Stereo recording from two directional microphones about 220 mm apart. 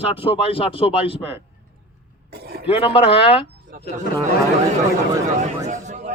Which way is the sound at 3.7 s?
40° right (ahead or behind).